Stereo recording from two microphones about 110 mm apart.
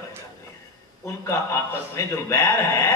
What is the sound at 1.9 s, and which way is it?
A man's voice, 25° left (ahead or behind).